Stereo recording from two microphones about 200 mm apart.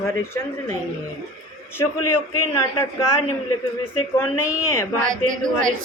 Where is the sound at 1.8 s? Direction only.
15° left (ahead or behind).